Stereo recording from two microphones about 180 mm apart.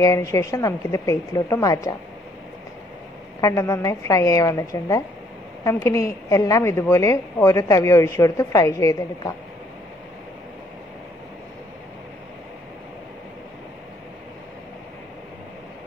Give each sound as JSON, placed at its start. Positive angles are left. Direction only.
{"t": 0.0, "sound": "a woman's voice", "side_deg": 15}
{"t": 3.3, "sound": "a woman's voice", "side_deg": 15}